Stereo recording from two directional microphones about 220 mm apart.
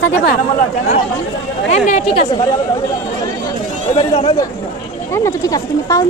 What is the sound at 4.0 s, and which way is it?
Speech, 25° left (ahead or behind).